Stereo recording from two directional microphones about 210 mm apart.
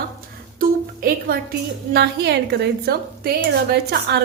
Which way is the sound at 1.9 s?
50° right (ahead or behind).